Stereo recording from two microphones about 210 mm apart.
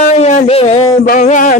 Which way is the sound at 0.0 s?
35° left (ahead or behind).